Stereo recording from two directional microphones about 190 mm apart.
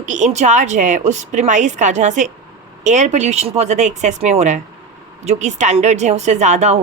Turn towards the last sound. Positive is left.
turn(degrees=-35)  # may be behind; listen again after turning